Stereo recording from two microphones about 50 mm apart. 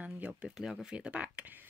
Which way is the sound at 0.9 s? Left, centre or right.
Right.